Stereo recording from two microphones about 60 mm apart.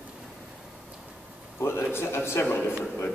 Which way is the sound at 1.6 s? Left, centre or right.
Left.